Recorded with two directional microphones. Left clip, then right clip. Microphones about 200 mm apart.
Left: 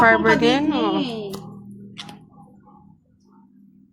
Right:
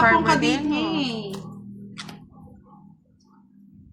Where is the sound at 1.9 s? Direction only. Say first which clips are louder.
Left 1 dB; 10° right (ahead or behind).